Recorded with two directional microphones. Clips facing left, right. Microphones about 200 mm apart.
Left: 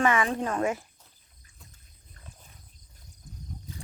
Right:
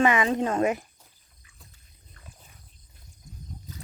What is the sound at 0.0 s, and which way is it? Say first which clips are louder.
Speech: right 3 dB; 20° right (ahead or behind).